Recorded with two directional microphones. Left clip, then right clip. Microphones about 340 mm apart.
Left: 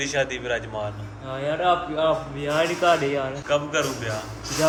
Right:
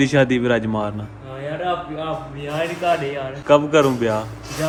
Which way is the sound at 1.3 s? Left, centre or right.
Centre.